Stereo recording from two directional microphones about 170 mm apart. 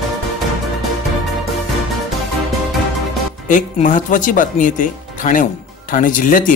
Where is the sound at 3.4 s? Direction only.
50° left (ahead or behind).